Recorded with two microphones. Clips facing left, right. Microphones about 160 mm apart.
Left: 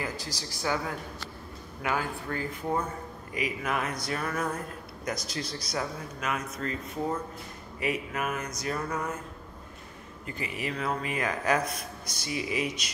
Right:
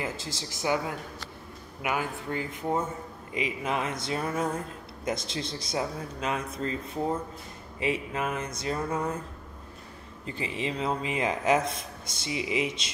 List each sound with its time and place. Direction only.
0.0 s a man's voice: 25° right (ahead or behind)
10.2 s a man's voice: 25° right (ahead or behind)